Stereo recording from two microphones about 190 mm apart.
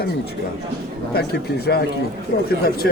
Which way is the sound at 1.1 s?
55° left (ahead or behind).